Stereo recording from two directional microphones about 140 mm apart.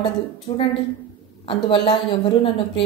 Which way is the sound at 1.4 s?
40° left (ahead or behind).